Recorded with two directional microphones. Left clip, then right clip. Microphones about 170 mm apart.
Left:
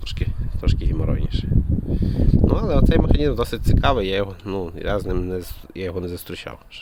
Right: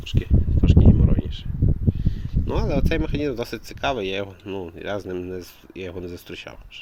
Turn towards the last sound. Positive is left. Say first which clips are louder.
# left 3 dB
turn(degrees=40)  # may be behind; listen again after turning